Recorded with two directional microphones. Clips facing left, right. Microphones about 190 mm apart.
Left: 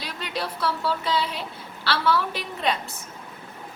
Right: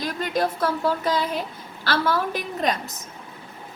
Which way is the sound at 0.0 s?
45° right (ahead or behind).